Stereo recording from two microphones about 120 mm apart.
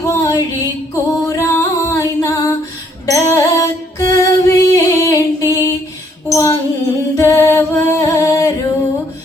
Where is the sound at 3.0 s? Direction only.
25° left (ahead or behind).